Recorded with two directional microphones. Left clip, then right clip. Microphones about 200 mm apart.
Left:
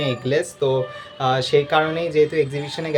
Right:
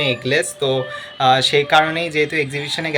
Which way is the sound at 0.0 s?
10° left (ahead or behind).